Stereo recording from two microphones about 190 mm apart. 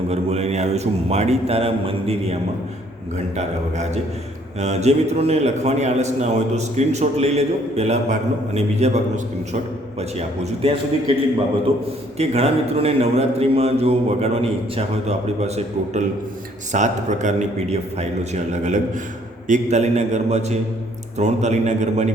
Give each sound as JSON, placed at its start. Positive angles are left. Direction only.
{"t": 0.1, "sound": "a man's voice", "side_deg": -35}
{"t": 12.1, "sound": "a man's voice", "side_deg": -35}